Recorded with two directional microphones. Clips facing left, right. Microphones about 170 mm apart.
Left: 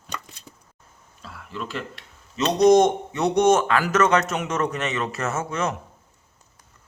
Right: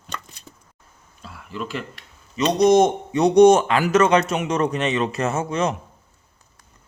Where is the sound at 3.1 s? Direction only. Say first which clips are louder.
Right 7 dB; 15° right (ahead or behind).